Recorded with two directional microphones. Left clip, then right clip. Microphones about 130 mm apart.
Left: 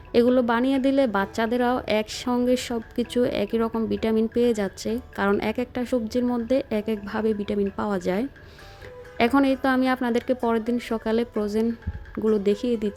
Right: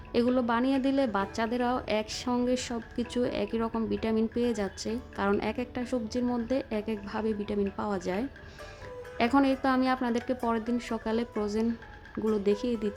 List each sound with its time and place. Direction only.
0.1 s a woman's voice: 30° left (ahead or behind)